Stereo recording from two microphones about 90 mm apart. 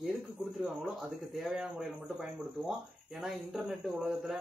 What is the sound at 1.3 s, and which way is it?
Speech, 5° right (ahead or behind).